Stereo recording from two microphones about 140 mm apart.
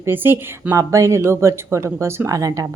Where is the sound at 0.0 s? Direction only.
15° right (ahead or behind).